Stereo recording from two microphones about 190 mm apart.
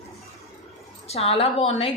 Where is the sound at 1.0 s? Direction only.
30° left (ahead or behind).